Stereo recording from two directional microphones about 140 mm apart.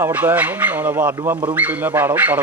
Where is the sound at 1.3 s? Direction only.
35° right (ahead or behind).